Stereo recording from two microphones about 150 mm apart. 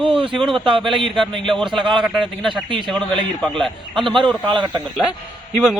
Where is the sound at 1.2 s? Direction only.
Centre (ahead or behind).